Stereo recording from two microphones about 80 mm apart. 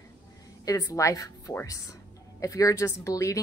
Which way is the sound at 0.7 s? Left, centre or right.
Left.